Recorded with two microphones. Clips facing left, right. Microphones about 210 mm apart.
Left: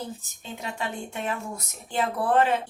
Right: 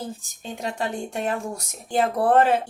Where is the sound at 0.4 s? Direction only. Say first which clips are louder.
Right 5 dB; 40° right (ahead or behind).